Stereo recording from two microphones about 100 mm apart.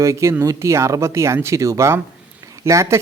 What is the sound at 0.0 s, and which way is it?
Speech, 30° right (ahead or behind).